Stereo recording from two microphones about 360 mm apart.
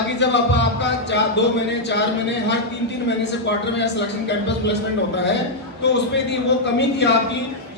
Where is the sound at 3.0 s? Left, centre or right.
Left.